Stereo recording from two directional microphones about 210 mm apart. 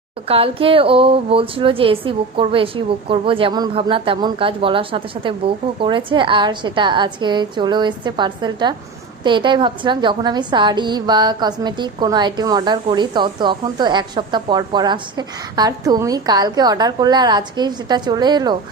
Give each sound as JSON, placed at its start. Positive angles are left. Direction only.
{"t": 0.3, "sound": "a woman's voice", "side_deg": -25}